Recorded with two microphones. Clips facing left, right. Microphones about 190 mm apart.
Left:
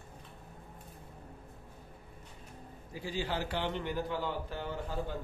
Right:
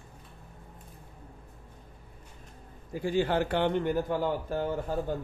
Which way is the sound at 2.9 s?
55° right (ahead or behind).